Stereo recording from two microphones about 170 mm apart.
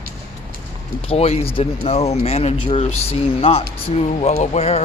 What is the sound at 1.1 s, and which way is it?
A man's voice, 35° left (ahead or behind).